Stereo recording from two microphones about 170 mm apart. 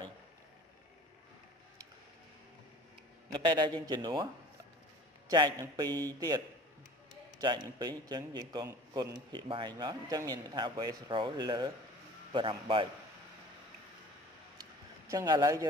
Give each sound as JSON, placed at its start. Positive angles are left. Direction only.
{"t": 3.3, "sound": "a man's voice", "side_deg": -25}
{"t": 5.3, "sound": "a man's voice", "side_deg": -25}
{"t": 14.6, "sound": "a sound", "side_deg": -20}